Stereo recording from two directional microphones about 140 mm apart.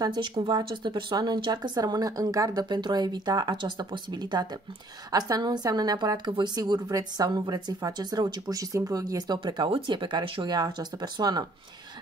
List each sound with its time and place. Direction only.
0.0 s a woman's voice: 35° right (ahead or behind)